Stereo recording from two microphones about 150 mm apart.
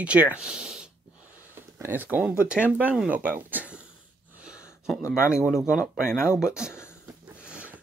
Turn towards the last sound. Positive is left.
turn(degrees=-5)  # may be behind; listen again after turning